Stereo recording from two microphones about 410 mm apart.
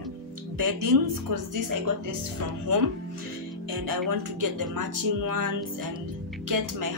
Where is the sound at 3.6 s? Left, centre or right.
Right.